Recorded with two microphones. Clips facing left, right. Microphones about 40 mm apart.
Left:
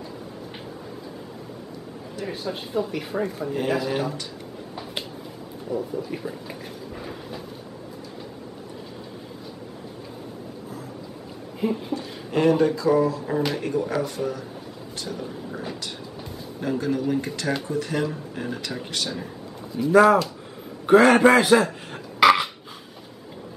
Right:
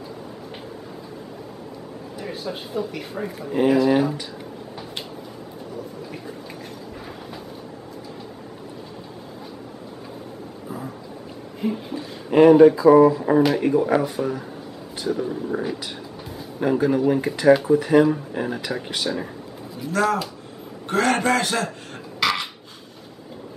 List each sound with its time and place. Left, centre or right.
2.1 s speech: centre
5.7 s speech: centre
11.6 s a sound: centre
12.3 s speech: centre
13.4 s speech: centre
13.7 s speech: centre
16.5 s speech: centre
19.9 s a man's voice: centre
22.2 s a sound: centre